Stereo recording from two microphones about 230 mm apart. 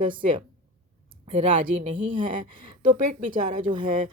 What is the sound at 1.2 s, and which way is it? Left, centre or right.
Speech, right.